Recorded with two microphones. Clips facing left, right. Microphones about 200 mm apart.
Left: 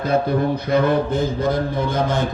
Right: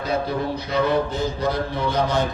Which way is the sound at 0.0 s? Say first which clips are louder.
Left 5 dB; 50° left (ahead or behind).